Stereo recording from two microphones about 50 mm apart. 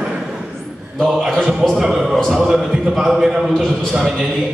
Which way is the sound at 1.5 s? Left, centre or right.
Centre.